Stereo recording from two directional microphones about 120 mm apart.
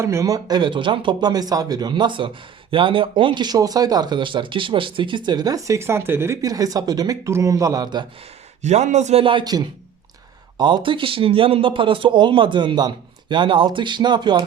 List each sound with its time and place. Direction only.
0.0 s speech: 25° right (ahead or behind)
8.6 s a man's voice: 70° right (ahead or behind)
9.2 s speech: 40° right (ahead or behind)